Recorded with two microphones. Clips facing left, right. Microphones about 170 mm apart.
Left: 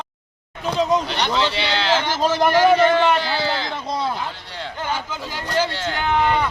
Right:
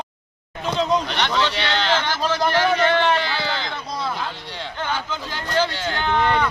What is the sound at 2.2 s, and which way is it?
Speech, 20° left (ahead or behind).